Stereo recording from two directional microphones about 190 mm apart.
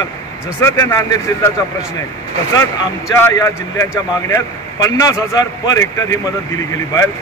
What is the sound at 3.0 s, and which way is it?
A man's voice, 15° left (ahead or behind).